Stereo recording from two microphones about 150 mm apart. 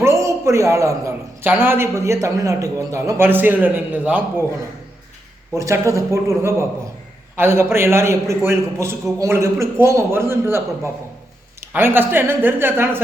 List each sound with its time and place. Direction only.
0.0 s a man's voice: 20° right (ahead or behind)
5.5 s a man's voice: 20° right (ahead or behind)